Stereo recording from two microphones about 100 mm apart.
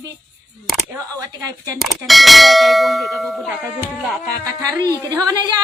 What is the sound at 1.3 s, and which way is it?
Speech, 35° right (ahead or behind).